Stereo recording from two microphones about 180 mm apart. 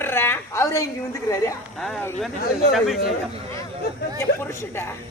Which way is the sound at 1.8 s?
5° left (ahead or behind).